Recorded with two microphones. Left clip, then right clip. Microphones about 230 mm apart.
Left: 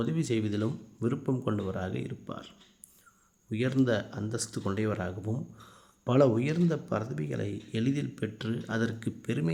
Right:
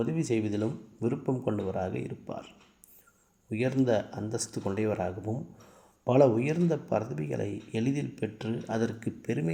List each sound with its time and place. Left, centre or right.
0.0 s speech: centre
3.5 s speech: centre